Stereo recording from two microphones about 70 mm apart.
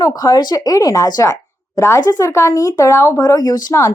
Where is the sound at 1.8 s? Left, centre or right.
Left.